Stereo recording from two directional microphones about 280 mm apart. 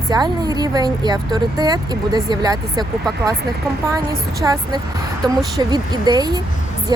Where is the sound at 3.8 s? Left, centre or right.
Centre.